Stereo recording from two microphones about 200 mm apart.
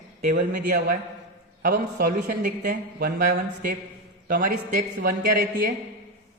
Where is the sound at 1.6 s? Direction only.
50° right (ahead or behind).